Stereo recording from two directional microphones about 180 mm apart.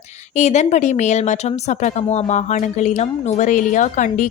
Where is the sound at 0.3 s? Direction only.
40° left (ahead or behind).